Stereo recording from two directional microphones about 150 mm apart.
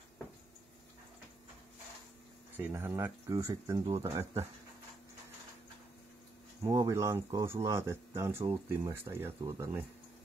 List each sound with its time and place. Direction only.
2.5 s speech: 15° right (ahead or behind)
6.6 s speech: 20° right (ahead or behind)